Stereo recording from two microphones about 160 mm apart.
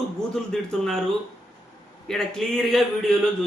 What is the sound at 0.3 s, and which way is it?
Speech, 5° left (ahead or behind).